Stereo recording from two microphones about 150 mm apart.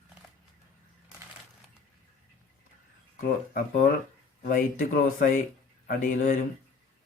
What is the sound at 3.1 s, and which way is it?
A man's voice, 65° left (ahead or behind).